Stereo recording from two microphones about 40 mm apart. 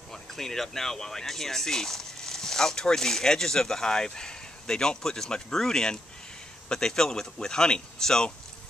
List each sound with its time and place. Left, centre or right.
0.1 s speech: centre